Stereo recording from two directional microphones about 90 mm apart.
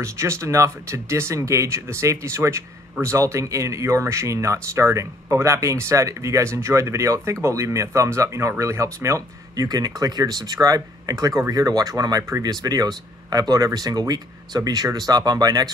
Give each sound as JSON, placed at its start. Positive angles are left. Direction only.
{"t": 0.0, "sound": "speech", "side_deg": -30}
{"t": 9.7, "sound": "speech", "side_deg": -45}